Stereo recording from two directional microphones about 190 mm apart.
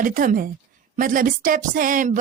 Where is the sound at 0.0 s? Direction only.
45° right (ahead or behind).